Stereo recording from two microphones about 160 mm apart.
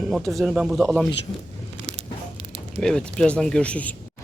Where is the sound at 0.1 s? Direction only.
Centre (ahead or behind).